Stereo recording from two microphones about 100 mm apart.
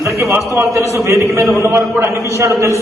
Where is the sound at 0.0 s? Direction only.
30° right (ahead or behind).